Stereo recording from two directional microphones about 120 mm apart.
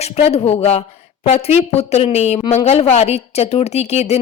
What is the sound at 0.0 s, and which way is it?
Speech, 60° left (ahead or behind).